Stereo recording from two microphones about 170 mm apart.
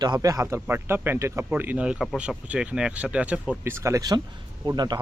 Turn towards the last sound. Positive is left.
turn(degrees=-25)  # may be behind; listen again after turning